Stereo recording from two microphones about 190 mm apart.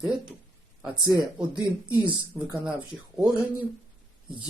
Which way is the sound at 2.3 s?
15° right (ahead or behind).